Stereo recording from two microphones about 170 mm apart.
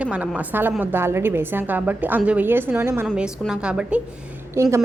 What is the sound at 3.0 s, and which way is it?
Speech, centre (ahead or behind).